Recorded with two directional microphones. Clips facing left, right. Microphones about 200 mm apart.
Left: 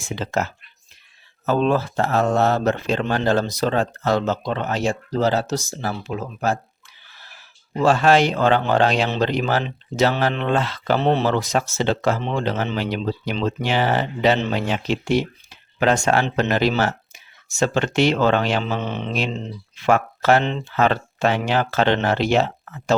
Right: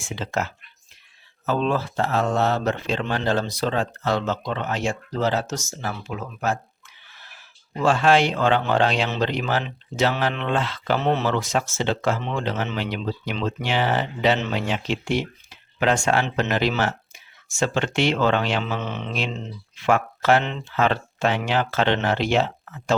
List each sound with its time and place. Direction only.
0.0 s speech: 40° left (ahead or behind)
1.5 s speech: 45° left (ahead or behind)
7.8 s speech: 40° left (ahead or behind)